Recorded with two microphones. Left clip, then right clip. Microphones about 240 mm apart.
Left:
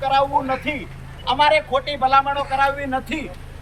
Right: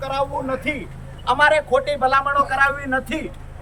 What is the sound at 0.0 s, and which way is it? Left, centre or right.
A woman's voice, centre.